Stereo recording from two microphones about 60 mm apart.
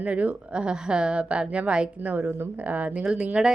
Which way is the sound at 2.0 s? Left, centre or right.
Right.